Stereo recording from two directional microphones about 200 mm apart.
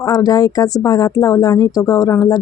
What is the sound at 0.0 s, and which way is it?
Speech, 20° left (ahead or behind).